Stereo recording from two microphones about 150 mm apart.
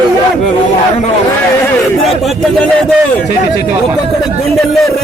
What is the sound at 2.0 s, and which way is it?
Speech, centre (ahead or behind).